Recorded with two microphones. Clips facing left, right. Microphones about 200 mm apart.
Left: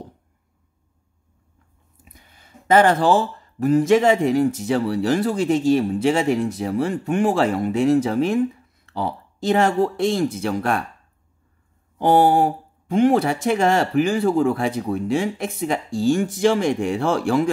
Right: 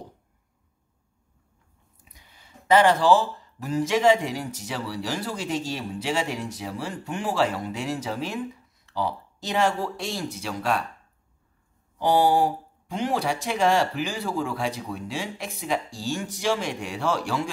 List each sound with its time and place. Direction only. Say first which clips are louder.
2.1 s speech: left 3 dB; 50° left (ahead or behind)
12.0 s speech: left 4 dB; 50° left (ahead or behind)